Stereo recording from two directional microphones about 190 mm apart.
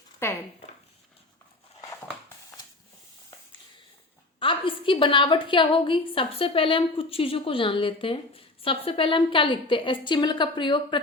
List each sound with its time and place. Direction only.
0.2 s speech: 15° left (ahead or behind)
4.4 s a woman's voice: 25° left (ahead or behind)